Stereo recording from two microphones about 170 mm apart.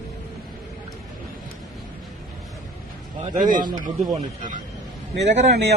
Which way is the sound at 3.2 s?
50° right (ahead or behind).